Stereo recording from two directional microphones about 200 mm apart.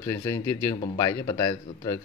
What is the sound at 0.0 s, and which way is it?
Speech, 15° left (ahead or behind).